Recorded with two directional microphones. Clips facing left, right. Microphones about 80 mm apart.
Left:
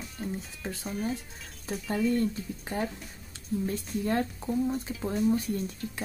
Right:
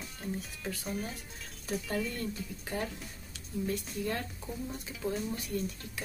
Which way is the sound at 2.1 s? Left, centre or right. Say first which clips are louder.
Left 10 dB; left.